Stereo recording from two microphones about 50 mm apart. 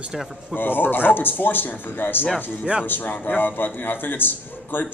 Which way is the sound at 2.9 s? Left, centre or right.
Left.